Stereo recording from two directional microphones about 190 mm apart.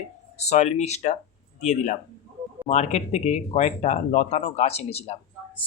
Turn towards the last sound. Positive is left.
turn(degrees=35)  # may be behind; listen again after turning